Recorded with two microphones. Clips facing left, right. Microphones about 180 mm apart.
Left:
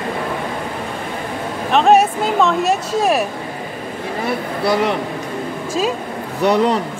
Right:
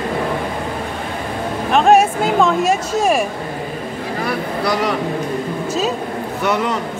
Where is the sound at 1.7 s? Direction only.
5° right (ahead or behind).